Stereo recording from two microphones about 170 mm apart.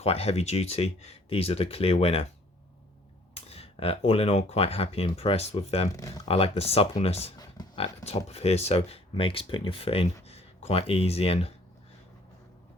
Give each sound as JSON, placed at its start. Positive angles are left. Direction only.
{"t": 0.0, "sound": "speech", "side_deg": 35}
{"t": 3.3, "sound": "speech", "side_deg": 35}
{"t": 5.9, "sound": "speech", "side_deg": 20}
{"t": 6.2, "sound": "speech", "side_deg": 35}